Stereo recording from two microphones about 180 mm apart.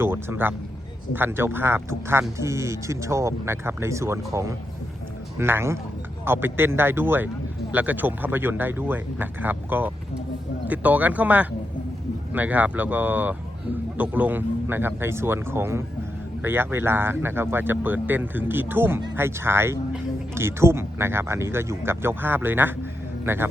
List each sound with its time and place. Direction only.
0.0 s a man's voice: 10° right (ahead or behind)